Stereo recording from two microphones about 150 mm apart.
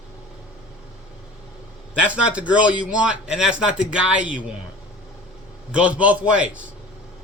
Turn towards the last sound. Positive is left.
turn(degrees=-10)  # may be behind; listen again after turning